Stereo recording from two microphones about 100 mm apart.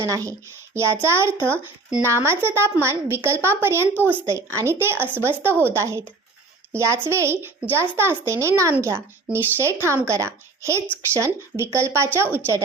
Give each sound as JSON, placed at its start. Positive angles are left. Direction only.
{"t": 0.0, "sound": "speech", "side_deg": -35}